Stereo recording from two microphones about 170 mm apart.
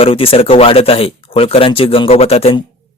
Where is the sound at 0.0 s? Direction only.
35° left (ahead or behind).